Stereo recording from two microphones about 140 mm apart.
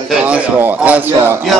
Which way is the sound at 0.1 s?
10° right (ahead or behind).